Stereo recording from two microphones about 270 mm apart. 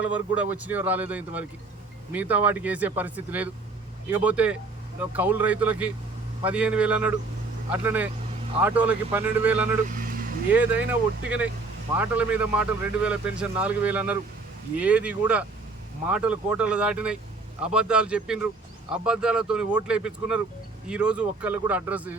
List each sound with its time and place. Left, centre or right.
0.0 s speech: centre
9.9 s vehicle: right
10.5 s speech: centre
11.9 s speech: centre